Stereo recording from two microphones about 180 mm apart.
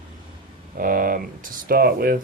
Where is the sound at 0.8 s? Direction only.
50° right (ahead or behind).